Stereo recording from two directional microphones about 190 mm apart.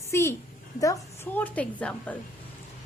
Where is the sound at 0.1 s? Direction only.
15° left (ahead or behind).